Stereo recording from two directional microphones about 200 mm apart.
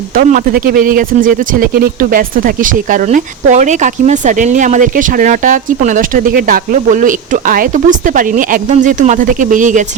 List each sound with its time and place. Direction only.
0.2 s speech: 45° right (ahead or behind)